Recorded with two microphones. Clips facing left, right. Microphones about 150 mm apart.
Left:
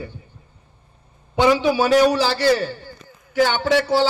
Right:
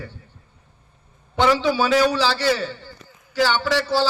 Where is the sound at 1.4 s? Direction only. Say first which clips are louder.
Left 2 dB; 15° left (ahead or behind).